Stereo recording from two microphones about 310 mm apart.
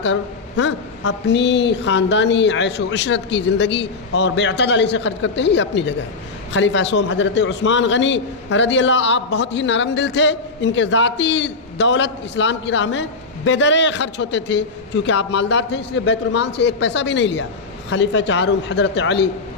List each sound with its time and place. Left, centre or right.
0.0 s a man's voice: left